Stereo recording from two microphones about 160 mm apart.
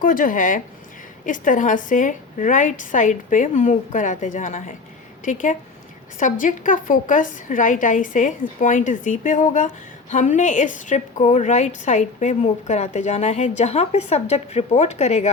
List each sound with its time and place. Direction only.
0.0 s a woman's voice: 60° left (ahead or behind); by 15.3 s 45° left (ahead or behind)